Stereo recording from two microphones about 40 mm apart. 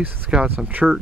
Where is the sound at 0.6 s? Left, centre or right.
Right.